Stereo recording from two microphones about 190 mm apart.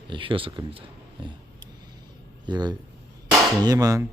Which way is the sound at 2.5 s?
20° right (ahead or behind).